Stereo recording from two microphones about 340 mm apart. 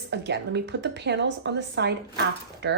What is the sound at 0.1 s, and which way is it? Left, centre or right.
A woman's voice, right.